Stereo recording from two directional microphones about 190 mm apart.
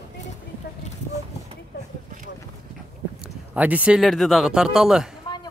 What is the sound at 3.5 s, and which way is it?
Speech, 10° right (ahead or behind).